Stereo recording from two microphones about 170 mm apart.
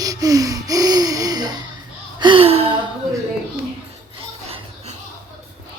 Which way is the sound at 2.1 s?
30° right (ahead or behind).